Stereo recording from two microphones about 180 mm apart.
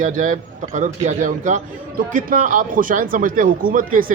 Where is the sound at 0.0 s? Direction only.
45° right (ahead or behind).